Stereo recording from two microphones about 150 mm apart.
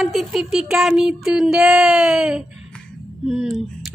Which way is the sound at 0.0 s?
Centre (ahead or behind).